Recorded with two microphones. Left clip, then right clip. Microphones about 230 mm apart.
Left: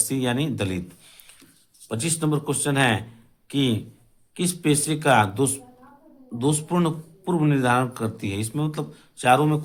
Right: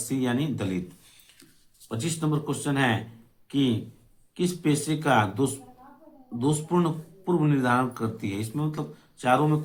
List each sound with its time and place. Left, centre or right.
0.1 s speech: left
1.9 s speech: left